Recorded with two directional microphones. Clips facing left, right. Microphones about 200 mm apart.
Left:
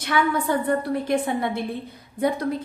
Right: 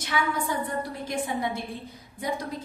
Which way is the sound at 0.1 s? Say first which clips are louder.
Left 6 dB; 65° left (ahead or behind).